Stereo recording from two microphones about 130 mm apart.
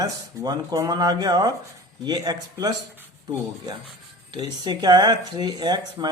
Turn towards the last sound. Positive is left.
turn(degrees=-35)  # may be behind; listen again after turning